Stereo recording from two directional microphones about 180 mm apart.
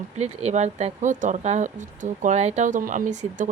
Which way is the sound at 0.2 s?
35° right (ahead or behind).